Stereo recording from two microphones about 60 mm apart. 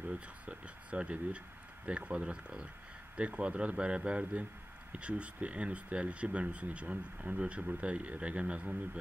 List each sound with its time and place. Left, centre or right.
0.1 s speech: centre